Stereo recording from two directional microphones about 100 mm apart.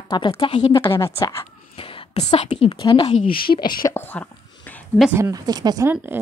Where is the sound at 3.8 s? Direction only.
40° left (ahead or behind).